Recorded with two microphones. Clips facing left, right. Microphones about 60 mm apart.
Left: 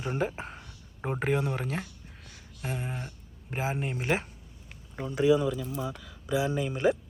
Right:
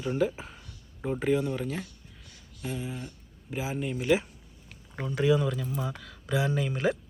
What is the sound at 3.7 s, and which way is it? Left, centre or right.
Speech, left.